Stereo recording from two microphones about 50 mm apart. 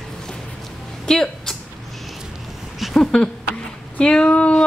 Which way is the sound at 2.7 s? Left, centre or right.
Centre.